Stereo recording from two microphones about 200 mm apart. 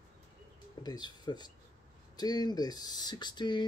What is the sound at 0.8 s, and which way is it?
Speech, 20° left (ahead or behind).